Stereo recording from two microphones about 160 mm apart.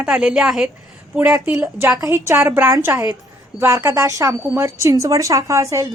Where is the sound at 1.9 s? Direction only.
20° right (ahead or behind).